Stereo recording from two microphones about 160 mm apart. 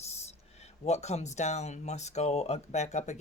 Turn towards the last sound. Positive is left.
turn(degrees=45)  # may be behind; listen again after turning